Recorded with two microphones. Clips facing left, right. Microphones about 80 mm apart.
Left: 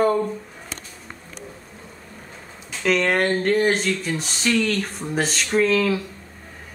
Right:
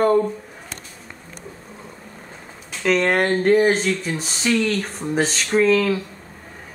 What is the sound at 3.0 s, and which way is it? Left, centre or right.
Speech, centre.